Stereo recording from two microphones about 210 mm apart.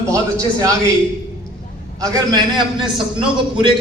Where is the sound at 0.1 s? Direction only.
15° right (ahead or behind).